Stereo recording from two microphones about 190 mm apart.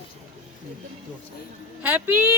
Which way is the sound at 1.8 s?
10° right (ahead or behind).